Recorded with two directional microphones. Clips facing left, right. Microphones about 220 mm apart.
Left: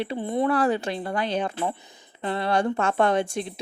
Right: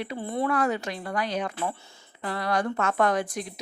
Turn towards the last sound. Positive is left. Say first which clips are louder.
# left 3 dB
turn(degrees=25)  # may be behind; listen again after turning